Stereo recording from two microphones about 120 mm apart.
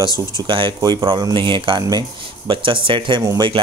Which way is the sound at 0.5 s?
40° right (ahead or behind).